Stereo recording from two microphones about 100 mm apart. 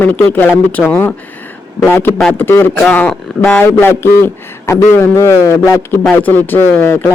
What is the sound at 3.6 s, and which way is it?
Speech, 25° left (ahead or behind).